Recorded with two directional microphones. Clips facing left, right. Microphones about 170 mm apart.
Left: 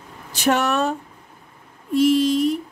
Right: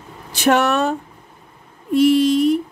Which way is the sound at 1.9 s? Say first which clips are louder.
Right 3 dB; 65° right (ahead or behind).